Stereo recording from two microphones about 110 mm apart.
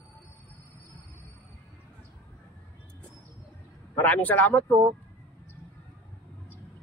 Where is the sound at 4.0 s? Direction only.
15° left (ahead or behind).